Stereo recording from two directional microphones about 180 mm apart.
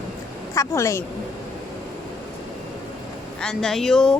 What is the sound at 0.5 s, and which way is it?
Speech, 15° left (ahead or behind).